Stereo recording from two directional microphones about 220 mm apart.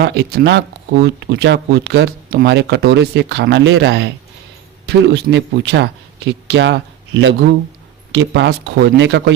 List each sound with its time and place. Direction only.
0.0 s speech: 50° right (ahead or behind)